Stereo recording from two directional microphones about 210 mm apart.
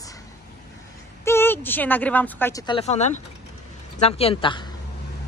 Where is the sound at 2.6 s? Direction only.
30° left (ahead or behind).